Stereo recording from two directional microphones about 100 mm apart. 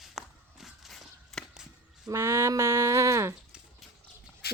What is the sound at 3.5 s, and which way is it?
Horse, 10° right (ahead or behind).